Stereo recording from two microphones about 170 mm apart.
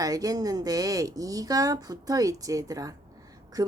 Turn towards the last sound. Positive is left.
turn(degrees=-20)  # may be behind; listen again after turning